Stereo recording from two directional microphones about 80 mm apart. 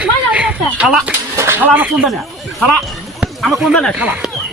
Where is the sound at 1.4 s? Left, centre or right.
Right.